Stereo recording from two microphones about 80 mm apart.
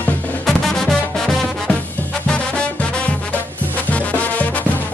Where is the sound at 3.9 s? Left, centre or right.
Centre.